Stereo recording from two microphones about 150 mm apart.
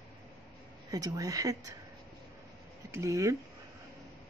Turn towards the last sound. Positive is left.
turn(degrees=-20)  # may be behind; listen again after turning